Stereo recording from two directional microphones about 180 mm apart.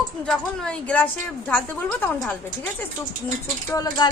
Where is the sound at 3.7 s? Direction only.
20° left (ahead or behind).